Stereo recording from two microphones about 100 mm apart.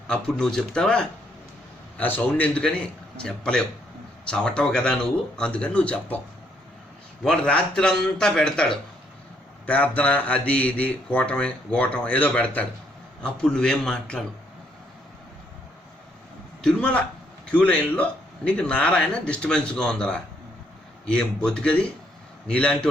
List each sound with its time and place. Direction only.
0.1 s a man's voice: 10° left (ahead or behind)
7.3 s a man's voice: 10° left (ahead or behind)
16.6 s a man's voice: 10° left (ahead or behind)